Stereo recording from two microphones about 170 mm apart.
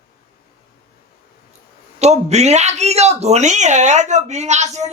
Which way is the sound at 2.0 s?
40° right (ahead or behind).